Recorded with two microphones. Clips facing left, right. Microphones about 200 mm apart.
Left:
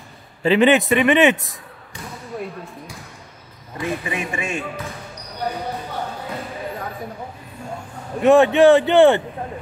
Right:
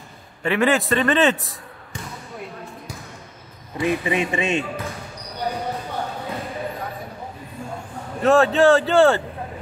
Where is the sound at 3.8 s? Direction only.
15° right (ahead or behind).